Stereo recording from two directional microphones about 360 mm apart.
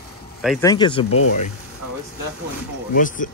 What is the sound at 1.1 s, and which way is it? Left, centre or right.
Speech, left.